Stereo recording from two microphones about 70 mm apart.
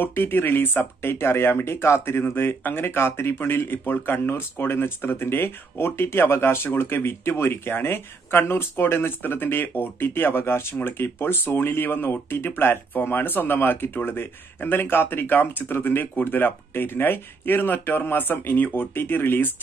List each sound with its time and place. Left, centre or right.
0.0 s speech: left